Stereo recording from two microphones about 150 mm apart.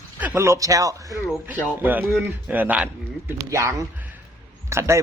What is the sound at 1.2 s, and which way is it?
A man's voice, 10° right (ahead or behind).